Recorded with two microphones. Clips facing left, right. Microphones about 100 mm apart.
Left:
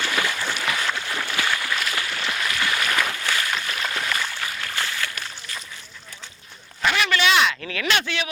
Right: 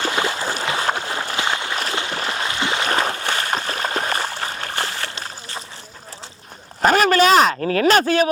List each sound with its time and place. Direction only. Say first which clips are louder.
0.1 s boat: right 3 dB; 25° right (ahead or behind)
0.9 s a sound: right 5 dB; 35° right (ahead or behind)
6.8 s speech: right 7 dB; 40° right (ahead or behind)